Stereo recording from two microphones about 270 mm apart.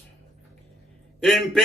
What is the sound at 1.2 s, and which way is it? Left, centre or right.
Speech, centre.